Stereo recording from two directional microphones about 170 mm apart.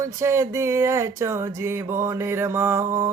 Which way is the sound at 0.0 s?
15° right (ahead or behind).